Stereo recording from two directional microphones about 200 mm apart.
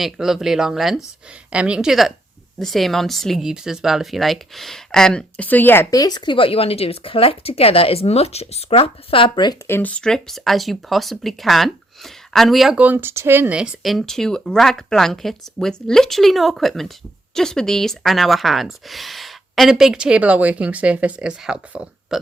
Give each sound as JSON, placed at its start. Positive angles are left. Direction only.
{"t": 0.0, "sound": "speech", "side_deg": 0}
{"t": 9.6, "sound": "speech", "side_deg": 10}